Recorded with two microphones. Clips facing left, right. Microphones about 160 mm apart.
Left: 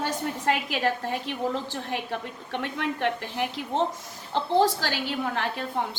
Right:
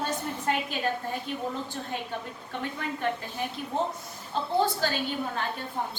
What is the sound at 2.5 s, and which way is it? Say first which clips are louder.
A woman's voice: left 4 dB; 75° left (ahead or behind).